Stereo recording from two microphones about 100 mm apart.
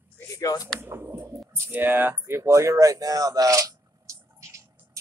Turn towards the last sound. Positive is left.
turn(degrees=-30)  # may be behind; listen again after turning